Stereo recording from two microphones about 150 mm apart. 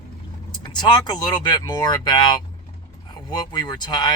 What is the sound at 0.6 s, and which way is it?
Speech, 30° left (ahead or behind).